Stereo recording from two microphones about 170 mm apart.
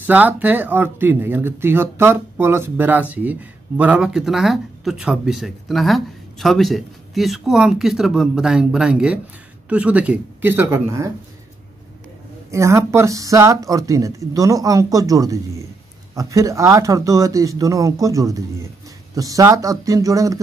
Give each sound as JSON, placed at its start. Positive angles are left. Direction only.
{"t": 0.0, "sound": "speech", "side_deg": -10}
{"t": 12.4, "sound": "speech", "side_deg": -15}